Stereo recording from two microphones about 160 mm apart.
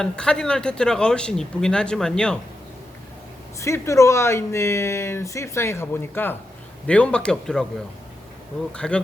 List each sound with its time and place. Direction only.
0.0 s speech: 5° left (ahead or behind)
3.6 s speech: 20° left (ahead or behind); by 7.7 s 5° left (ahead or behind)
8.7 s speech: 5° left (ahead or behind)